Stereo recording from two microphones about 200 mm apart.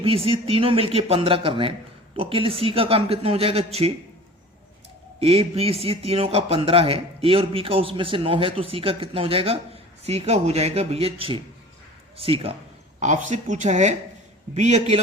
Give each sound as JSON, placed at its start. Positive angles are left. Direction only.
{"t": 0.0, "sound": "speech", "side_deg": -30}
{"t": 5.2, "sound": "speech", "side_deg": -30}